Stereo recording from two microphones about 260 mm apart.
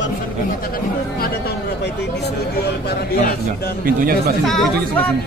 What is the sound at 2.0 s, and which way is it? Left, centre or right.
A man's voice, left.